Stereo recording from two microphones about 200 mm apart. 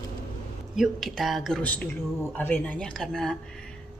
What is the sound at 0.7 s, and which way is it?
Speech, centre (ahead or behind).